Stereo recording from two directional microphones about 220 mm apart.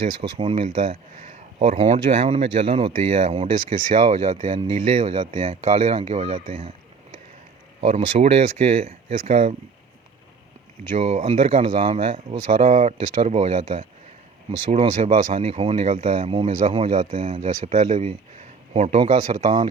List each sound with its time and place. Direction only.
0.2 s speech: 25° right (ahead or behind)
7.8 s speech: 30° right (ahead or behind)
10.9 s a man's voice: 30° right (ahead or behind)